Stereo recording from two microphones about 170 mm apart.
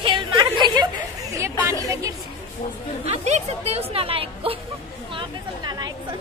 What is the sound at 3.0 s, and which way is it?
A woman's voice, 40° right (ahead or behind).